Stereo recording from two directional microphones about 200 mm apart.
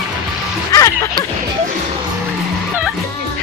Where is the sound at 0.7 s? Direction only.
15° left (ahead or behind).